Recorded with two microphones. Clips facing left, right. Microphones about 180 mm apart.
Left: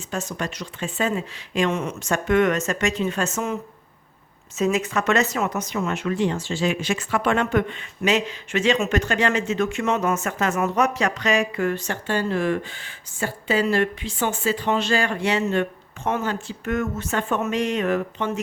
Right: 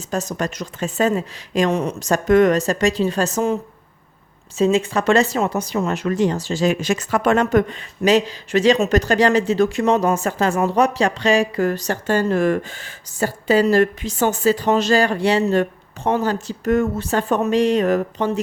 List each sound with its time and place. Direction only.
0.1 s speech: 40° right (ahead or behind)